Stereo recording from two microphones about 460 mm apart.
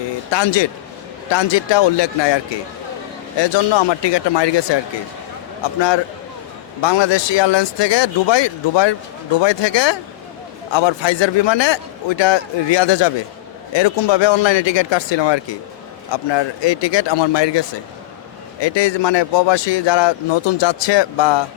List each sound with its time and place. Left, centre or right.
0.3 s a man's voice: left
6.8 s a man's voice: left